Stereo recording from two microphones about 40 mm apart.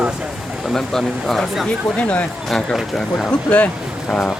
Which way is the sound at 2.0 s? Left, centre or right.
Left.